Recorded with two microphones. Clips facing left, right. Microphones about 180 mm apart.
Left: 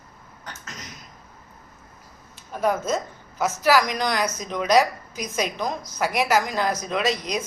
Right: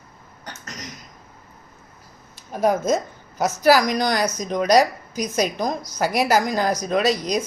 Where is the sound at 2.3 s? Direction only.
40° right (ahead or behind).